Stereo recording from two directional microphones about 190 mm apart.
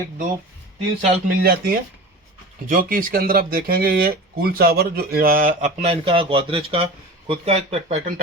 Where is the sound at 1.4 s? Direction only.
55° right (ahead or behind).